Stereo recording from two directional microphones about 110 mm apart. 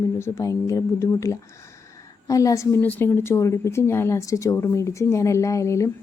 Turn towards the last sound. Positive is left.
turn(degrees=25)  # may be behind; listen again after turning